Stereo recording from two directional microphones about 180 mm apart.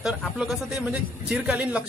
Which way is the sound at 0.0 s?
5° right (ahead or behind).